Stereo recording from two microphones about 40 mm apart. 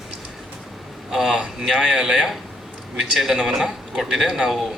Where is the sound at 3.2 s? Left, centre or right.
Centre.